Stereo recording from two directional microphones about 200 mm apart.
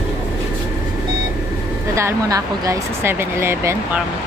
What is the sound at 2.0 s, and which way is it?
Speech, 15° right (ahead or behind).